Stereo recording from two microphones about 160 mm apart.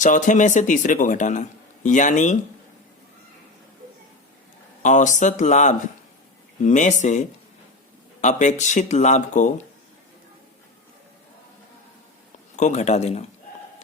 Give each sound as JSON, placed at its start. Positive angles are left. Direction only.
{"t": 0.0, "sound": "speech", "side_deg": 50}
{"t": 4.8, "sound": "speech", "side_deg": 50}
{"t": 12.5, "sound": "speech", "side_deg": 45}